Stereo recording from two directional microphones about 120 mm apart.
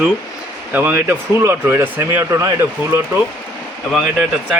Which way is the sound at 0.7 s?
15° right (ahead or behind).